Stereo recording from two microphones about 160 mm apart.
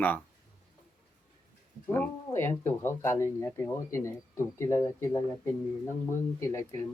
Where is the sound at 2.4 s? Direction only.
15° left (ahead or behind).